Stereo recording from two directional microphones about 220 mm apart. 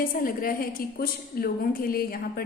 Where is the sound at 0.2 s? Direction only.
40° left (ahead or behind).